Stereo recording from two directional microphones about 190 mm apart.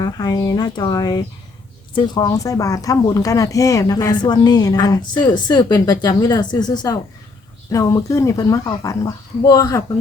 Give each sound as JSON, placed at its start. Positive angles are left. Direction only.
{"t": 0.0, "sound": "speech", "side_deg": 20}